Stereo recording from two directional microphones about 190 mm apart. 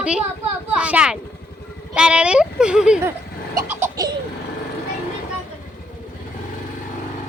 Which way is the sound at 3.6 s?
15° right (ahead or behind).